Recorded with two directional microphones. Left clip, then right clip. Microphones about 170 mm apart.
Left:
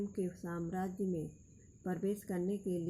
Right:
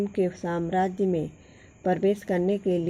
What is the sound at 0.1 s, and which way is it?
A woman's voice, 35° right (ahead or behind).